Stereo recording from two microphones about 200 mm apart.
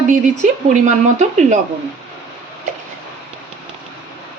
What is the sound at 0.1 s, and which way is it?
Speech, 40° right (ahead or behind).